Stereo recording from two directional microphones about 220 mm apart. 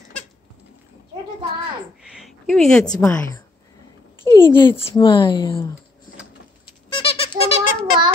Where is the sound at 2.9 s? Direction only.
10° left (ahead or behind).